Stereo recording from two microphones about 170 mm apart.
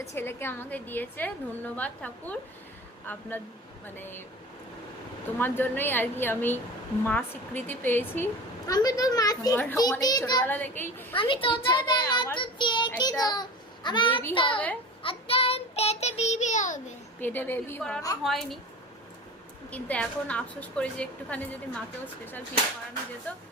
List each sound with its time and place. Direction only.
0.0 s a woman's voice: 15° left (ahead or behind)
5.4 s a woman's voice: 10° left (ahead or behind)
10.4 s a woman's voice: 10° left (ahead or behind)
11.1 s a woman's voice: 30° left (ahead or behind)
15.0 s child singing: 35° left (ahead or behind)
17.2 s a woman's voice: 10° left (ahead or behind)
19.7 s a woman's voice: 5° left (ahead or behind)
23.3 s a woman's voice: 10° left (ahead or behind)